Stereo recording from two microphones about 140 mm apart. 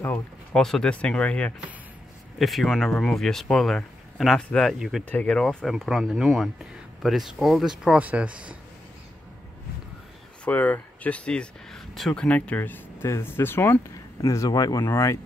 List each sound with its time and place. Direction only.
0.0 s speech: 10° left (ahead or behind); by 8.5 s 10° right (ahead or behind)
10.4 s speech: 10° left (ahead or behind)